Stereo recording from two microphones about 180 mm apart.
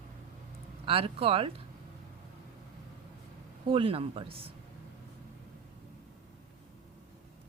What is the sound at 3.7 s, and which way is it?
Speech, 30° right (ahead or behind).